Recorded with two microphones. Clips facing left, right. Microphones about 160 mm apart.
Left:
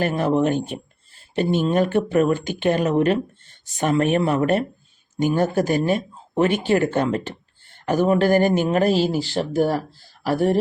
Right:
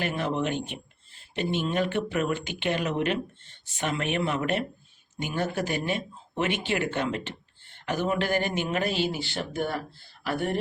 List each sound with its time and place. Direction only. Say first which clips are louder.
0.0 s speech: left 8 dB; 40° left (ahead or behind)